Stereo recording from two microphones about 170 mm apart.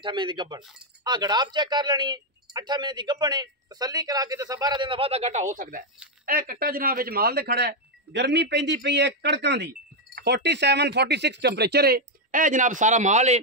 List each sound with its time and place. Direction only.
0.0 s speech: 30° right (ahead or behind); by 13.4 s 45° right (ahead or behind)